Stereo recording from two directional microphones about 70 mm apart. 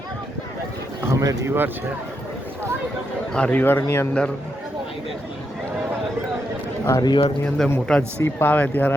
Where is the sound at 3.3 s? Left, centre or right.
Centre.